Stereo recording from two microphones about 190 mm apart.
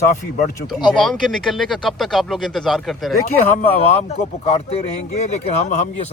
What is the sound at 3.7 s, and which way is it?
Speech, 35° left (ahead or behind).